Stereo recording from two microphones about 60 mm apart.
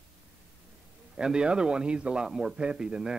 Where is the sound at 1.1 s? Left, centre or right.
Centre.